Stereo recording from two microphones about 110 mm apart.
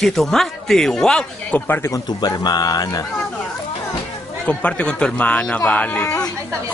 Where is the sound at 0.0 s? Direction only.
5° left (ahead or behind).